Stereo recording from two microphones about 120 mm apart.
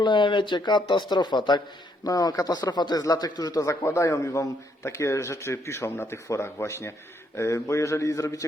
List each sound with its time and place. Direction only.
0.0 s speech: 40° left (ahead or behind); by 8.4 s 25° left (ahead or behind)